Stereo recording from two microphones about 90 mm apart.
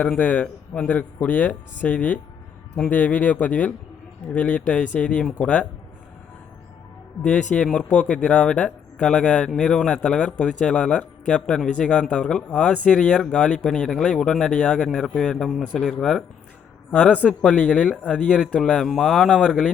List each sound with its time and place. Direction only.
0.0 s speech: 15° left (ahead or behind)
7.3 s speech: 10° left (ahead or behind)